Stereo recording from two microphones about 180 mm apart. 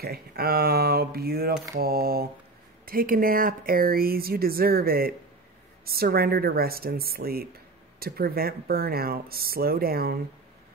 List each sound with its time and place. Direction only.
0.0 s speech: 55° right (ahead or behind)